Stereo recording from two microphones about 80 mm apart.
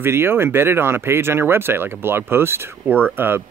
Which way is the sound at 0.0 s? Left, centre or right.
Right.